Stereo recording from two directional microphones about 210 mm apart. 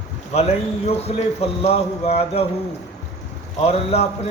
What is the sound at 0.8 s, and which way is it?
Speech, 30° left (ahead or behind).